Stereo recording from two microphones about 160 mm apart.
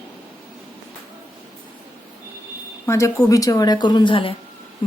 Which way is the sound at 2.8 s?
20° left (ahead or behind).